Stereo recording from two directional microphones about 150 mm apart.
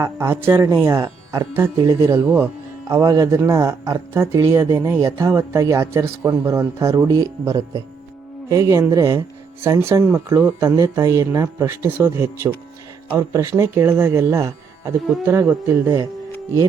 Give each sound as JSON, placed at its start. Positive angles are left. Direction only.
{"t": 0.0, "sound": "speech", "side_deg": -20}